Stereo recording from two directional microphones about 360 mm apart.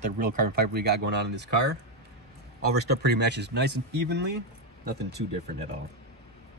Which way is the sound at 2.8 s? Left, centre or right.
Right.